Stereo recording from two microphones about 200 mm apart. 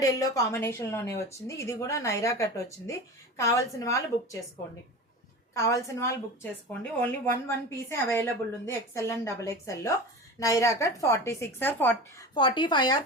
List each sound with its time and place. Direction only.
0.0 s a woman's voice: 15° left (ahead or behind)
5.5 s a woman's voice: 15° left (ahead or behind)
12.3 s speech: 25° left (ahead or behind)